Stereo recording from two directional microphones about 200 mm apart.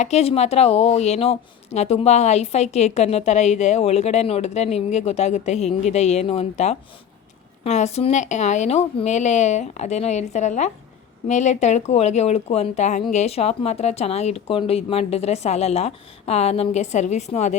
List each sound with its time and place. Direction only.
0.0 s a woman's voice: 30° left (ahead or behind)